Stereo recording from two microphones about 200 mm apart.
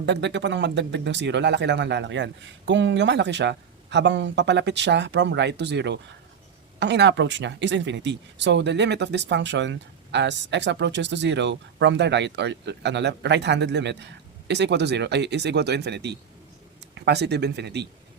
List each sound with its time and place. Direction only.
0.0 s speech: 60° right (ahead or behind)